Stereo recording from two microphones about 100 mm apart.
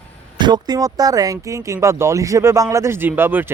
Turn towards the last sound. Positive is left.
turn(degrees=-20)  # may be behind; listen again after turning